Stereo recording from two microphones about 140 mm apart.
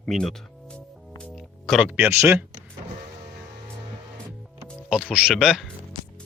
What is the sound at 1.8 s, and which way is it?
Speech, 15° right (ahead or behind).